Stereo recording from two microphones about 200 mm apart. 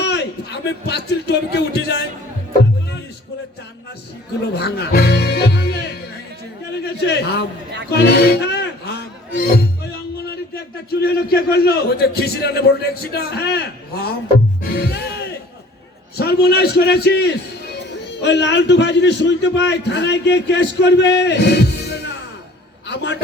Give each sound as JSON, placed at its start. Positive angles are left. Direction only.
{"t": 0.0, "sound": "a man's voice", "side_deg": 60}
{"t": 4.5, "sound": "a man's voice", "side_deg": 55}
{"t": 7.9, "sound": "music", "side_deg": 55}
{"t": 11.0, "sound": "a man's voice", "side_deg": 55}
{"t": 14.7, "sound": "music", "side_deg": 50}
{"t": 16.1, "sound": "a man's voice", "side_deg": 55}